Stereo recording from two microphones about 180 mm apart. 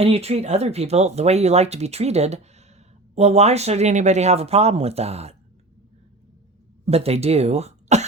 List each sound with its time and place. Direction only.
0.0 s speech: 35° right (ahead or behind)
6.8 s speech: 35° right (ahead or behind)